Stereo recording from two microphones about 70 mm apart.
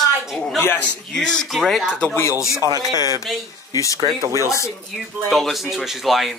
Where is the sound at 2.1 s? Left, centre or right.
Left.